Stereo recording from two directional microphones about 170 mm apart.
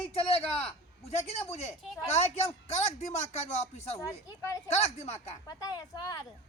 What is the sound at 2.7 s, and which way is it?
A man's voice, 40° left (ahead or behind).